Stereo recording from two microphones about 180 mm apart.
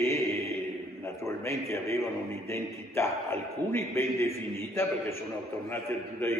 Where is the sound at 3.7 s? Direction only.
15° left (ahead or behind).